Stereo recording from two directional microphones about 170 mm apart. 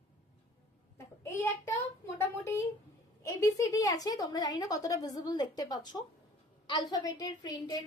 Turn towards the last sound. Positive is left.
turn(degrees=25)  # may be behind; listen again after turning